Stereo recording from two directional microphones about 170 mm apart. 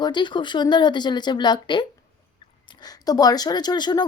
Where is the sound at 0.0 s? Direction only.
25° left (ahead or behind).